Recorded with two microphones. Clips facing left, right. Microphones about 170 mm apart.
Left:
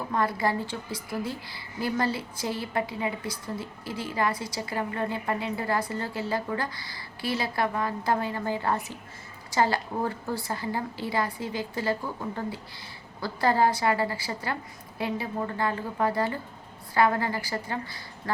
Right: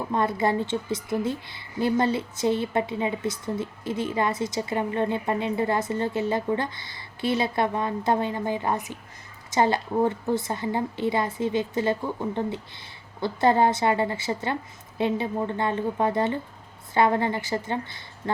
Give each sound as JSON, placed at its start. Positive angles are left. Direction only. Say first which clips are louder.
{"t": 0.1, "sound": "a woman's voice", "louder": "right 3 dB", "side_deg": -25}